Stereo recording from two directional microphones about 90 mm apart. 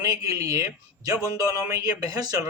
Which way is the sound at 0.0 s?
35° right (ahead or behind).